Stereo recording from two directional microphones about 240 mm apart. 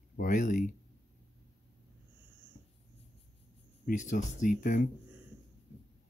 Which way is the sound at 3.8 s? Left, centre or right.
Left.